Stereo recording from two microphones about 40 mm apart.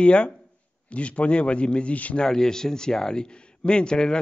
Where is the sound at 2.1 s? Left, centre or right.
Centre.